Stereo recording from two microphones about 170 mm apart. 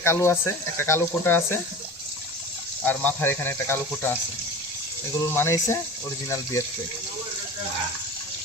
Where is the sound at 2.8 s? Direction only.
10° left (ahead or behind).